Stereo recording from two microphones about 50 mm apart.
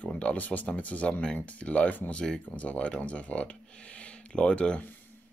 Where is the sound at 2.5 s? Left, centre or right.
Left.